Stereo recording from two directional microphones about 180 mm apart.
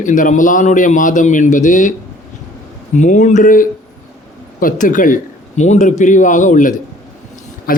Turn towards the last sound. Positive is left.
turn(degrees=55)  # may be behind; listen again after turning